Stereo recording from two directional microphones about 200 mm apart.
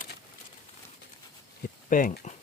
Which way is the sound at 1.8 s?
45° left (ahead or behind).